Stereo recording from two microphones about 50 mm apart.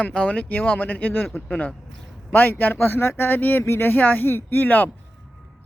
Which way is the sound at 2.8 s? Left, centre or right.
Left.